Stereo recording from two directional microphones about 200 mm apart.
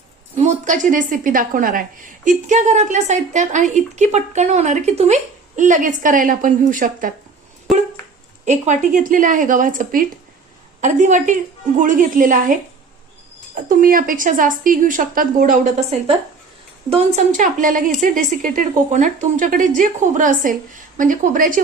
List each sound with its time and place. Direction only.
0.3 s a woman's voice: 35° right (ahead or behind)
8.4 s a woman's voice: 35° right (ahead or behind)
13.7 s a woman's voice: 45° right (ahead or behind)